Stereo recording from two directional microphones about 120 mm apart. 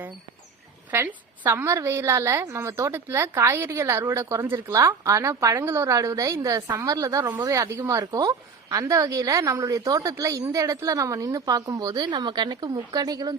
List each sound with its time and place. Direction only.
0.9 s a woman's voice: 15° right (ahead or behind); by 13.3 s 30° right (ahead or behind)